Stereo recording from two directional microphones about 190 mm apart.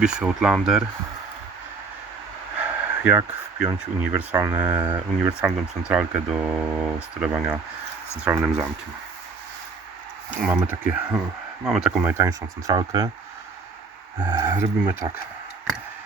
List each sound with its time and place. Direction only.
0.0 s speech: 5° right (ahead or behind)
2.6 s a sound: 10° right (ahead or behind)
4.2 s speech: 10° right (ahead or behind)
4.8 s speech: 20° right (ahead or behind)
5.4 s speech: 5° right (ahead or behind)
10.3 s speech: 5° right (ahead or behind)
14.2 s speech: 10° right (ahead or behind)